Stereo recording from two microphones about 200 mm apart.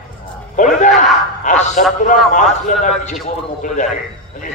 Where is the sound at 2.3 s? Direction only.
40° left (ahead or behind).